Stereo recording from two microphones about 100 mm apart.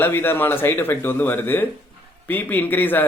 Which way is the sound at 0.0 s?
20° left (ahead or behind).